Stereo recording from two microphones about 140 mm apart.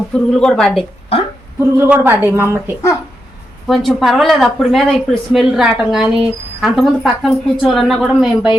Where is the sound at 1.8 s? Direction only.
15° right (ahead or behind).